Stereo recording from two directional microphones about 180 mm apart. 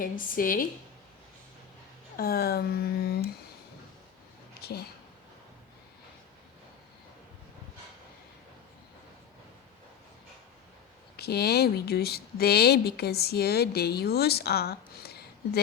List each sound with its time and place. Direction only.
0.0 s speech: 50° left (ahead or behind)
2.1 s speech: 60° left (ahead or behind)
11.2 s speech: 60° left (ahead or behind)